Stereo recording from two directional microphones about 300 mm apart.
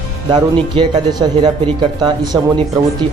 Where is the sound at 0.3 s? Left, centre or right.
Centre.